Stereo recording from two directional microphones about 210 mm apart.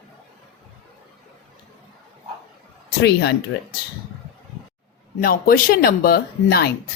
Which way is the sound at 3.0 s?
50° left (ahead or behind).